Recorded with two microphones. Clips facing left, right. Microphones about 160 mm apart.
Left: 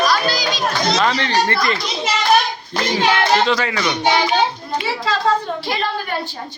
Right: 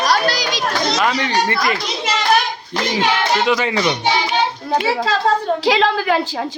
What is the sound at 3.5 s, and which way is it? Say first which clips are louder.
Speech: right 2 dB; 20° right (ahead or behind).